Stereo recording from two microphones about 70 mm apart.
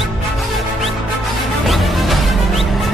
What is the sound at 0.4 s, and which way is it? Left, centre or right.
Music, centre.